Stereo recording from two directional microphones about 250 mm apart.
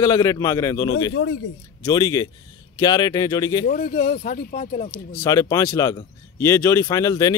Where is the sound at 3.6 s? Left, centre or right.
Left.